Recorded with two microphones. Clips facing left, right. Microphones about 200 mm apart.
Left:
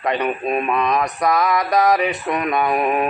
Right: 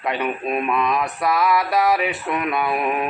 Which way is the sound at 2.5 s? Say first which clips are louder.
Left 4 dB; 40° left (ahead or behind).